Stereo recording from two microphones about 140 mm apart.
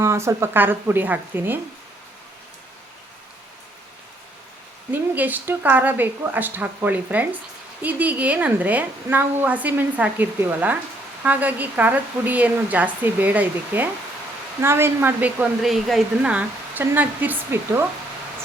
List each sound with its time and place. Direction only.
0.0 s a woman's voice: 20° right (ahead or behind)
4.9 s a woman's voice: 10° right (ahead or behind)
15.6 s a woman's voice: centre (ahead or behind)